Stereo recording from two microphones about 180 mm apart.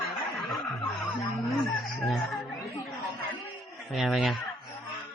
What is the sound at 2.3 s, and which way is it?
Chatter, centre (ahead or behind).